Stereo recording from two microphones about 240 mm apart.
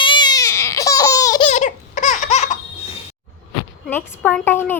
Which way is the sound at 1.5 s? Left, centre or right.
Left.